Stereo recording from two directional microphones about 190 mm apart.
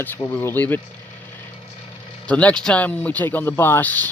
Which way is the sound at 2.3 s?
5° left (ahead or behind).